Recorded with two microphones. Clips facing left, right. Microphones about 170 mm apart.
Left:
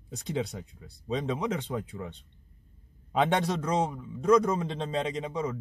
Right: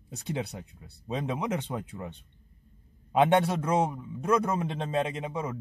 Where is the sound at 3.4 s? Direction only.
10° right (ahead or behind).